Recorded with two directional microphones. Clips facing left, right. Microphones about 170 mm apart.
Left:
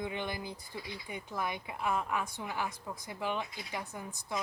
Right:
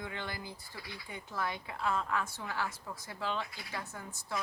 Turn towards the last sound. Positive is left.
turn(degrees=15)  # may be behind; listen again after turning